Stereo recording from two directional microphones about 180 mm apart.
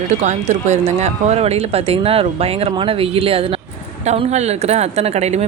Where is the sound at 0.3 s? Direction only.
40° right (ahead or behind).